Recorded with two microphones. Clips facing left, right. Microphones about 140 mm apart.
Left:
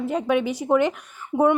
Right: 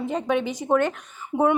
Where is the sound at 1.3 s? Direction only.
45° left (ahead or behind).